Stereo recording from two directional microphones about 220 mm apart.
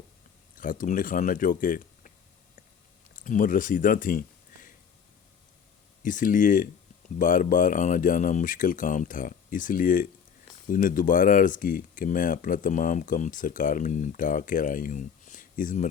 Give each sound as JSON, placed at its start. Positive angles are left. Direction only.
{"t": 0.5, "sound": "speech", "side_deg": 40}
{"t": 3.2, "sound": "speech", "side_deg": 35}
{"t": 6.0, "sound": "speech", "side_deg": 35}